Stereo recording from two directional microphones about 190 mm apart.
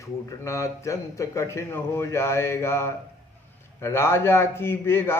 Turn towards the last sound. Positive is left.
turn(degrees=10)  # may be behind; listen again after turning